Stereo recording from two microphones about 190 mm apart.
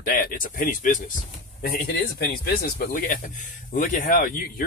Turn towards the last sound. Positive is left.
turn(degrees=45)  # may be behind; listen again after turning